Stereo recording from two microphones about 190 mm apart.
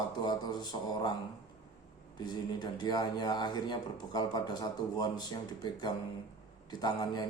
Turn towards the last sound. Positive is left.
turn(degrees=20)  # may be behind; listen again after turning